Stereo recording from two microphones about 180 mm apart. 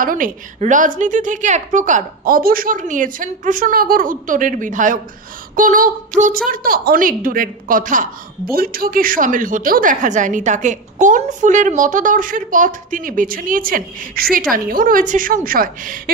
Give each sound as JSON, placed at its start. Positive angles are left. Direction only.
{"t": 0.0, "sound": "a woman's voice", "side_deg": -50}